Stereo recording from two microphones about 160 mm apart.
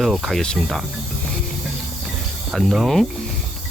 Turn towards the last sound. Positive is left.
turn(degrees=0)  # may be behind; listen again after turning